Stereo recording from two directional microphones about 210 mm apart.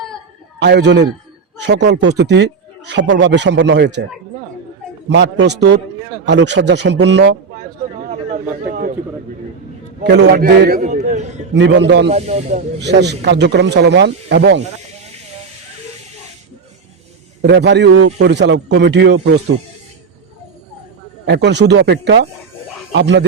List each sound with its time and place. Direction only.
0.6 s a man's voice: 55° right (ahead or behind)
5.0 s a man's voice: 55° right (ahead or behind)
7.9 s a sound: 35° right (ahead or behind)
10.0 s speech: 55° right (ahead or behind)
10.8 s a sound: 35° right (ahead or behind)
11.5 s a man's voice: 55° right (ahead or behind)
12.1 s speech: 30° right (ahead or behind)
12.8 s speech: 55° right (ahead or behind)
17.4 s a man's voice: 55° right (ahead or behind)
21.2 s speech: 55° right (ahead or behind)